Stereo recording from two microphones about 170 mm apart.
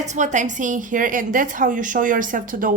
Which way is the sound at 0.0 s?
45° right (ahead or behind).